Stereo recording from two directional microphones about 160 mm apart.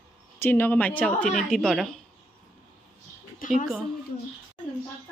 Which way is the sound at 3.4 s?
55° left (ahead or behind).